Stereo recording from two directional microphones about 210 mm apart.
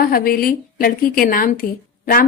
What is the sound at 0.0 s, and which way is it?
A woman's voice, 45° left (ahead or behind).